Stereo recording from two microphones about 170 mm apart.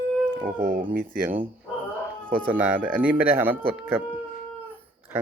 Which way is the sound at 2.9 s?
10° right (ahead or behind).